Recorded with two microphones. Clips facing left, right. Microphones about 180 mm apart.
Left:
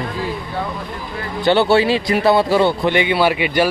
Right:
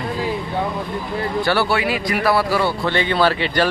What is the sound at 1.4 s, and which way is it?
Speech, 20° left (ahead or behind).